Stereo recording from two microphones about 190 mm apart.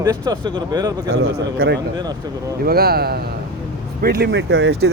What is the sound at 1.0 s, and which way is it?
Speech, 90° right.